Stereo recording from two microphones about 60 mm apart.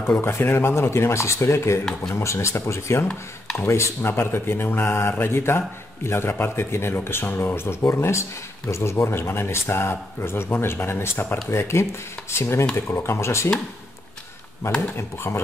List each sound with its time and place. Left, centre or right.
0.2 s speech: left
15.0 s speech: left